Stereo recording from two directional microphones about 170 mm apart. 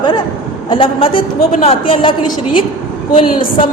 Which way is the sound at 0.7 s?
30° left (ahead or behind).